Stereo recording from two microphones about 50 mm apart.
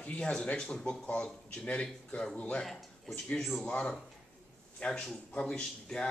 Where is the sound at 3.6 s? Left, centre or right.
Left.